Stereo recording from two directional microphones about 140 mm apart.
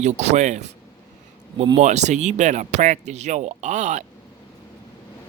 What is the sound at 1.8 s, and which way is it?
A man's voice, 55° right (ahead or behind).